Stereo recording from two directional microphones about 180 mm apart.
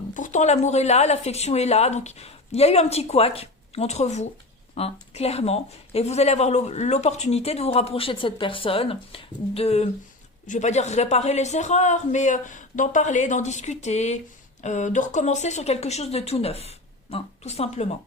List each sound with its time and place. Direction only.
0.1 s speech: 45° left (ahead or behind)